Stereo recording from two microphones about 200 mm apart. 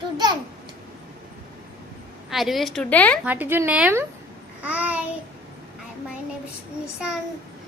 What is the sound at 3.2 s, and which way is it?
Speech, 10° right (ahead or behind).